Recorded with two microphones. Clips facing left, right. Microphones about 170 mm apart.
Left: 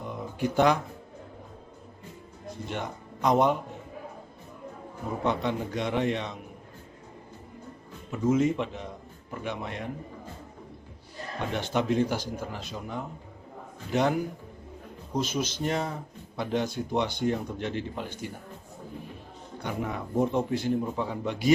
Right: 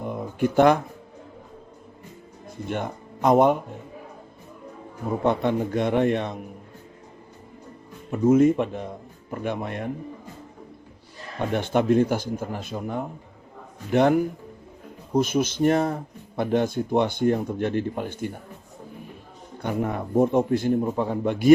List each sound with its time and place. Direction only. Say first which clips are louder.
0.0 s a sound: right 6 dB; 55° right (ahead or behind)
2.6 s a man's voice: right 6 dB; 50° right (ahead or behind)
5.2 s a man's voice: right 6 dB; 55° right (ahead or behind)
8.1 s a man's voice: right 7 dB; 55° right (ahead or behind)
11.5 s a man's voice: right 6 dB; 55° right (ahead or behind)
19.5 s a man's voice: right 6 dB; 50° right (ahead or behind)